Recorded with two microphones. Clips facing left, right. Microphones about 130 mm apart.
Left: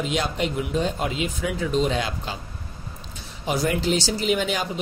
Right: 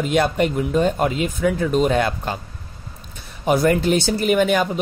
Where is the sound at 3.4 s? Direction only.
55° right (ahead or behind).